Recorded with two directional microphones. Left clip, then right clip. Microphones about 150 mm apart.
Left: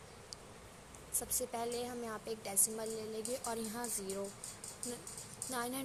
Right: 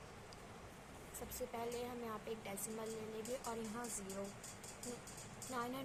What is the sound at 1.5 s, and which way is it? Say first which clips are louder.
A woman's voice: left 4 dB; 45° left (ahead or behind).